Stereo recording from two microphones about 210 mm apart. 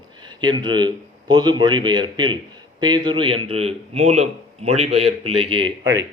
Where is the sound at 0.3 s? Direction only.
20° right (ahead or behind).